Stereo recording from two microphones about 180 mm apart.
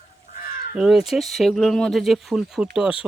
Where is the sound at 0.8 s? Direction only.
5° right (ahead or behind).